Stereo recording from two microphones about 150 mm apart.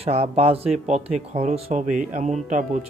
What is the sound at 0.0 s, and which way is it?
Speech, 40° right (ahead or behind).